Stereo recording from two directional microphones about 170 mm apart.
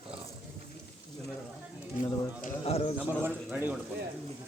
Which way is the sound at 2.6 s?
35° left (ahead or behind).